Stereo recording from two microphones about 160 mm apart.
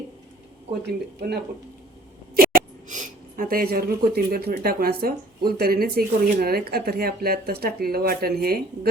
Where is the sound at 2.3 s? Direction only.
65° right (ahead or behind).